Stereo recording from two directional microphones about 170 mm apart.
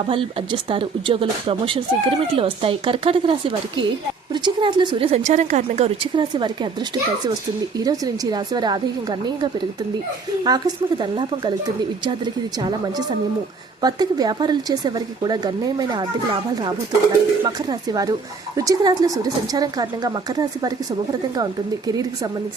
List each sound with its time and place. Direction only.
0.0 s speech: 30° right (ahead or behind)
7.9 s a woman's voice: 20° right (ahead or behind)